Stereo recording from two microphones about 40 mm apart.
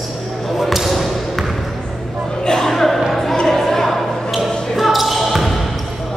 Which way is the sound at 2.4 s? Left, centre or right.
Centre.